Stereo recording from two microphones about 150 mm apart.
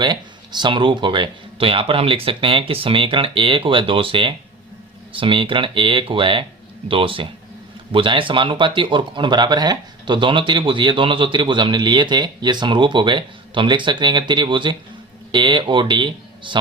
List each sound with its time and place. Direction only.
0.0 s speech: 30° right (ahead or behind)